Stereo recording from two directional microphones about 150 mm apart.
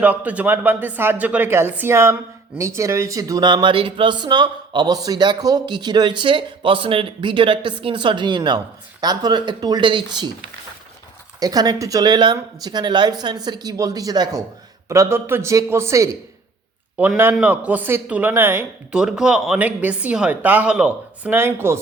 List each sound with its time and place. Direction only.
0.0 s speech: 10° right (ahead or behind); by 10.2 s 30° right (ahead or behind)
11.3 s speech: 25° right (ahead or behind)
18.9 s speech: 5° right (ahead or behind)